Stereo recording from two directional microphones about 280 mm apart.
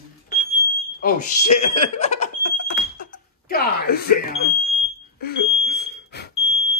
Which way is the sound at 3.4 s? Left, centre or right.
Left.